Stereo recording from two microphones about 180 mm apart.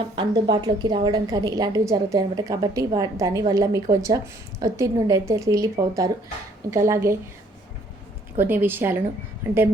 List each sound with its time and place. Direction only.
0.2 s a woman's voice: 25° right (ahead or behind)
8.4 s a woman's voice: 10° right (ahead or behind)